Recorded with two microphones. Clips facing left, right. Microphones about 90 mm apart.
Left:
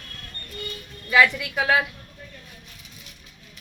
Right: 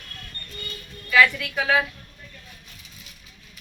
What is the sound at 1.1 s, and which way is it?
Speech, 10° left (ahead or behind).